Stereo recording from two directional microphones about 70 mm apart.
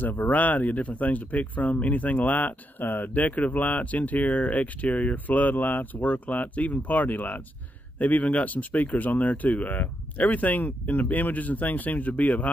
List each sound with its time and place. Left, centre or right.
0.0 s speech: left